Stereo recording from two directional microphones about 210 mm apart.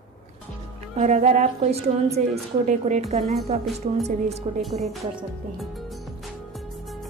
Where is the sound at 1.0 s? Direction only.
35° right (ahead or behind).